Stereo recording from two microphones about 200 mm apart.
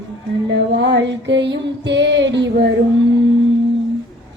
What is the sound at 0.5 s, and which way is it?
Music, 60° right (ahead or behind).